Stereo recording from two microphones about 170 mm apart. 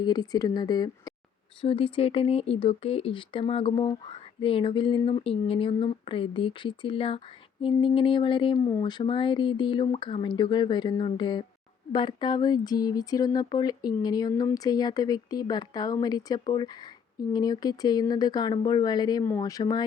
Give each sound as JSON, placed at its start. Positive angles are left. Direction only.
{"t": 0.0, "sound": "speech", "side_deg": 25}